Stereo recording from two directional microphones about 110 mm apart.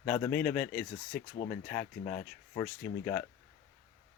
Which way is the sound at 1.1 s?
10° left (ahead or behind).